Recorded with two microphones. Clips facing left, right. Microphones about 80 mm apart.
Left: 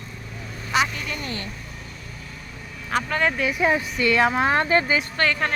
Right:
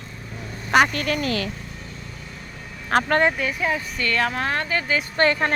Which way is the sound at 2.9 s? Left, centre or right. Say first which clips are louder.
Right 5 dB; right.